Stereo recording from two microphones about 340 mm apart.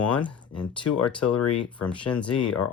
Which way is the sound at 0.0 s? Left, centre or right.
Centre.